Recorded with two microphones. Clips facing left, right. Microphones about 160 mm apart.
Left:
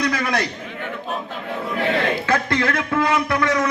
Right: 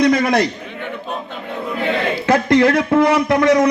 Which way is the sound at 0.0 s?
25° right (ahead or behind).